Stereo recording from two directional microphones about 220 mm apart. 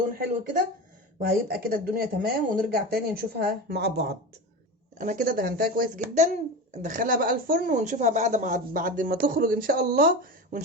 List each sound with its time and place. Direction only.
1.2 s speech: 45° right (ahead or behind)
4.9 s speech: 40° right (ahead or behind)